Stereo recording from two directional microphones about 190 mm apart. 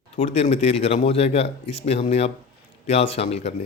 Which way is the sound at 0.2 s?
35° left (ahead or behind).